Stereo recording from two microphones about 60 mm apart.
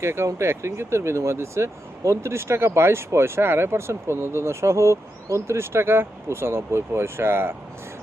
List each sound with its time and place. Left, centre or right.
0.0 s speech: right